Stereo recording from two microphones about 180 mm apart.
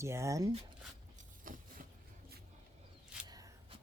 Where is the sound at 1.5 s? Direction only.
50° right (ahead or behind).